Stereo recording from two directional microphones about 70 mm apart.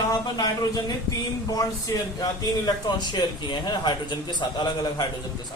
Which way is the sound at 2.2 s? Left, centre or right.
Left.